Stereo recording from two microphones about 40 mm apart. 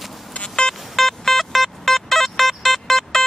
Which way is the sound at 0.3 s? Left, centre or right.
Left.